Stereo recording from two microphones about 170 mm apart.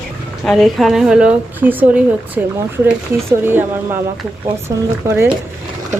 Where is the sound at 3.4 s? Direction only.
10° right (ahead or behind).